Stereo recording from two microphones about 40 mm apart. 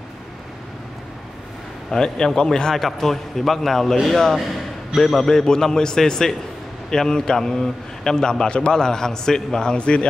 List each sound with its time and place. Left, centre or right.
1.9 s a man's voice: centre